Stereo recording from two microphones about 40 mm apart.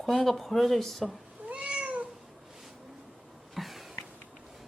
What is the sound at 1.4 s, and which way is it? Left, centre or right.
Cat, right.